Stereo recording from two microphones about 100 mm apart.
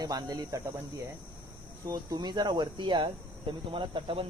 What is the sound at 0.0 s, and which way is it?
Speech, 40° right (ahead or behind).